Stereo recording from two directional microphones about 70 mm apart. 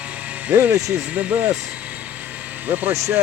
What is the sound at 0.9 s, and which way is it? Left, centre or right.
Speech, centre.